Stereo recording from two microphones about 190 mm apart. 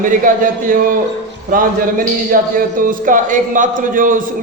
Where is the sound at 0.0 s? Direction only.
45° right (ahead or behind).